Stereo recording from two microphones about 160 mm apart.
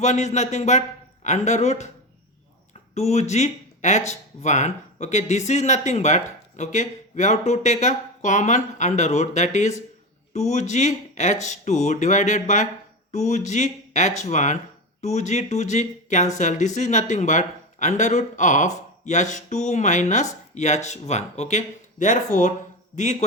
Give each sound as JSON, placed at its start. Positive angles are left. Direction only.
{"t": 0.0, "sound": "speech", "side_deg": 45}
{"t": 2.9, "sound": "speech", "side_deg": 45}